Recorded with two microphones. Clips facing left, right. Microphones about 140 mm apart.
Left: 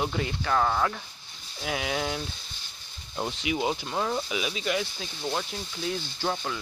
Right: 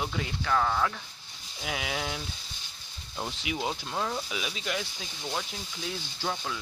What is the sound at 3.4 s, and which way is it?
Speech, 5° left (ahead or behind).